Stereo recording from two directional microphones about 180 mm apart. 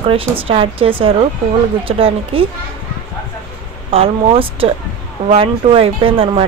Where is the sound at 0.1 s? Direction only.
30° right (ahead or behind).